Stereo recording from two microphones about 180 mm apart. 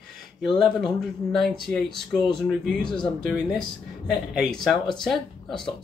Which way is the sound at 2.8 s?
25° left (ahead or behind).